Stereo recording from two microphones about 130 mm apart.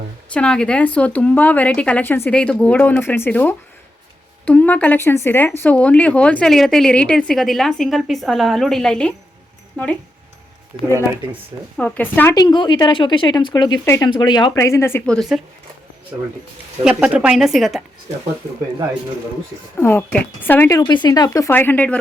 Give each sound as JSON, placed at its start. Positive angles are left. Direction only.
{"t": 0.3, "sound": "speech", "side_deg": 5}
{"t": 11.8, "sound": "speech", "side_deg": 15}
{"t": 12.3, "sound": "speech", "side_deg": 30}
{"t": 13.8, "sound": "speech", "side_deg": 20}
{"t": 14.1, "sound": "speech", "side_deg": 35}
{"t": 14.6, "sound": "speech", "side_deg": 20}
{"t": 15.0, "sound": "a woman's voice", "side_deg": 5}
{"t": 16.8, "sound": "a woman's voice", "side_deg": -10}
{"t": 19.7, "sound": "speech", "side_deg": 15}
{"t": 20.7, "sound": "speech", "side_deg": 35}